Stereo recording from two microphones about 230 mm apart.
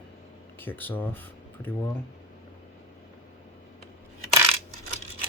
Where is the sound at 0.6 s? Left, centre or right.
Centre.